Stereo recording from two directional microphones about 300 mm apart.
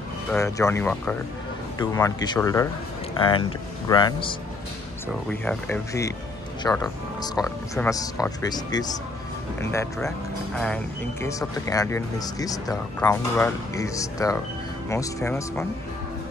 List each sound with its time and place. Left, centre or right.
0.3 s speech: centre
5.3 s speech: centre
11.2 s speech: centre